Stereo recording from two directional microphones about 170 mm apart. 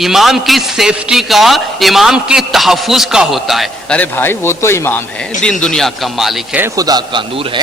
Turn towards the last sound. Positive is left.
turn(degrees=-30)  # may be behind; listen again after turning